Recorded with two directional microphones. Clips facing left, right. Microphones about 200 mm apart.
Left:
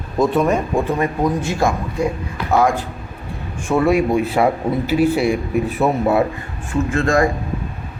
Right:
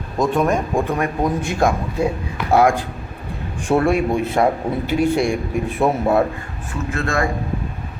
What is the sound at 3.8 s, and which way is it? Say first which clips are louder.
A man's voice: left 2 dB; 5° left (ahead or behind).